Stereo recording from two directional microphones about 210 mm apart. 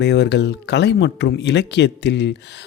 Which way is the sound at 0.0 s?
55° left (ahead or behind).